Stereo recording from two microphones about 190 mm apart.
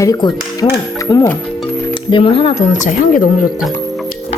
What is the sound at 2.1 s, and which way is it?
Speech, 30° left (ahead or behind).